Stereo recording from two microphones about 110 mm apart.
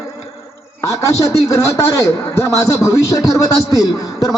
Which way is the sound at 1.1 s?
30° left (ahead or behind).